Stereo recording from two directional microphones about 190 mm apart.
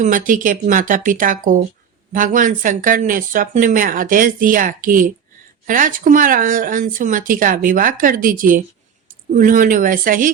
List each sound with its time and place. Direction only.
0.0 s speech: 45° right (ahead or behind)